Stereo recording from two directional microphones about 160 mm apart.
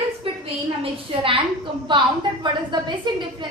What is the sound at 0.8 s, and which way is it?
A woman's voice, 35° right (ahead or behind).